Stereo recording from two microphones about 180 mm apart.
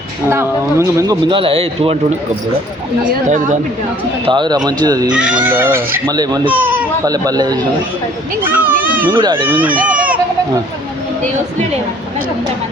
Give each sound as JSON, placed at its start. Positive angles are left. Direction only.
{"t": 0.3, "sound": "speech", "side_deg": -15}
{"t": 1.3, "sound": "speech", "side_deg": -30}
{"t": 3.2, "sound": "a woman's voice", "side_deg": -45}
{"t": 4.3, "sound": "speech", "side_deg": -25}
{"t": 5.3, "sound": "speech", "side_deg": -10}
{"t": 6.6, "sound": "speech", "side_deg": -10}
{"t": 7.1, "sound": "speech", "side_deg": -20}
{"t": 8.7, "sound": "children playing", "side_deg": -50}
{"t": 9.0, "sound": "speech", "side_deg": -30}
{"t": 9.6, "sound": "speech", "side_deg": -10}